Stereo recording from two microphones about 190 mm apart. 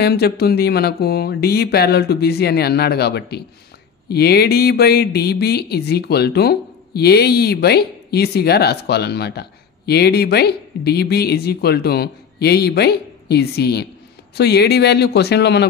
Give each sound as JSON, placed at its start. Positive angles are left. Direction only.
{"t": 0.0, "sound": "speech", "side_deg": 55}